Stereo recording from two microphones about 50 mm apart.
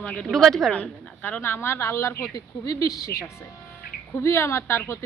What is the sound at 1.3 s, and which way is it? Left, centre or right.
A woman's voice, left.